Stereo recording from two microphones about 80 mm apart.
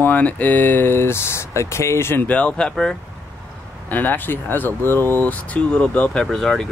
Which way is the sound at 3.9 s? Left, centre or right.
Left.